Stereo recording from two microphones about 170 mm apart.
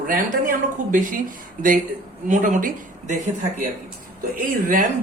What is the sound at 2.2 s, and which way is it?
Speech, 50° right (ahead or behind).